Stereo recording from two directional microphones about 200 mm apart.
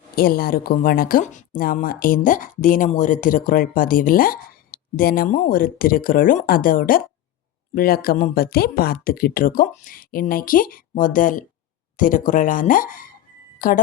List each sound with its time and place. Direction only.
0.2 s speech: 45° left (ahead or behind)